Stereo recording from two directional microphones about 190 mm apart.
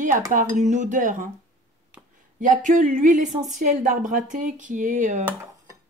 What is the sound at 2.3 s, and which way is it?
A woman's voice, 45° right (ahead or behind).